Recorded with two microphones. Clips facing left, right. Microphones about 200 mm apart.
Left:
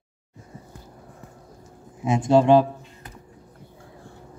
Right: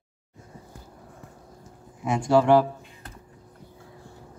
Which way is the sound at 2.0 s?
20° left (ahead or behind).